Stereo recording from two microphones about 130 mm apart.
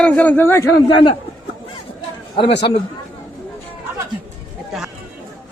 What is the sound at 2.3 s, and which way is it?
Speech, 40° left (ahead or behind).